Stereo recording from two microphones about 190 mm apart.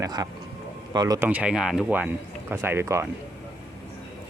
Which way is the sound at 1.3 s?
5° right (ahead or behind).